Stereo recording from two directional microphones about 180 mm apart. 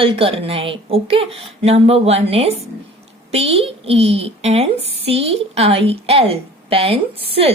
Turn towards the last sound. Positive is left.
turn(degrees=-30)  # may be behind; listen again after turning